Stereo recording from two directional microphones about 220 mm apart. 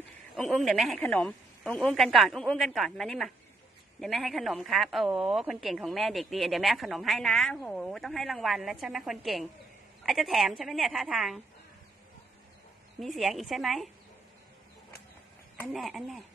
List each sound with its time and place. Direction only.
0.4 s a woman's voice: centre (ahead or behind)
13.0 s a woman's voice: centre (ahead or behind)
15.6 s a woman's voice: centre (ahead or behind)